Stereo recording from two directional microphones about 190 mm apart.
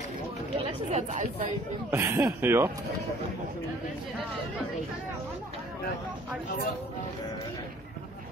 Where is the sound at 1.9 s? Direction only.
15° right (ahead or behind).